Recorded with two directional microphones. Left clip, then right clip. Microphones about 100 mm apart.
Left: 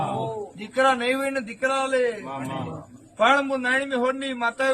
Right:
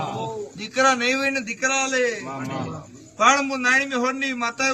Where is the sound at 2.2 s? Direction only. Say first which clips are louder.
Right 1 dB; 20° right (ahead or behind).